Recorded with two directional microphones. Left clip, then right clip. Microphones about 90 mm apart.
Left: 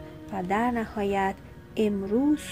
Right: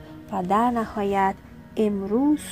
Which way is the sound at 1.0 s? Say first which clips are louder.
Right 4 dB; 15° right (ahead or behind).